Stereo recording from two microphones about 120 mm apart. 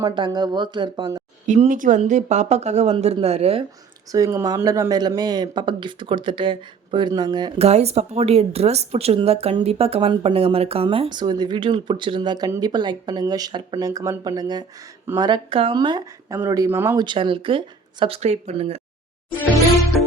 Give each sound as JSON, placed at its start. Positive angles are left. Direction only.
{"t": 0.0, "sound": "speech", "side_deg": -35}
{"t": 1.5, "sound": "speech", "side_deg": -80}
{"t": 4.1, "sound": "speech", "side_deg": -25}
{"t": 7.6, "sound": "speech", "side_deg": -60}
{"t": 16.3, "sound": "speech", "side_deg": -25}
{"t": 17.0, "sound": "speech", "side_deg": -45}
{"t": 18.0, "sound": "speech", "side_deg": -60}